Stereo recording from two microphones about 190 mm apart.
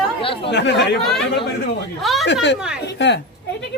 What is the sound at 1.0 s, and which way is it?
Speech, 5° left (ahead or behind).